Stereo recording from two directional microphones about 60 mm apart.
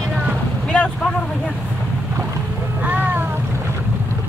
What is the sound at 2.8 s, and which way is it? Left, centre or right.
Boat, right.